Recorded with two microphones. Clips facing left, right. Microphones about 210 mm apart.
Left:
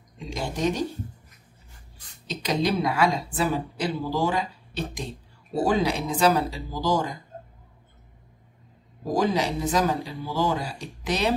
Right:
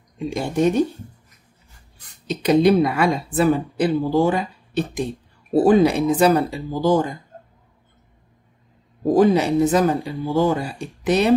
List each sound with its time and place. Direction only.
0.2 s speech: 55° right (ahead or behind)
2.2 s speech: 55° right (ahead or behind)
9.0 s speech: 55° right (ahead or behind)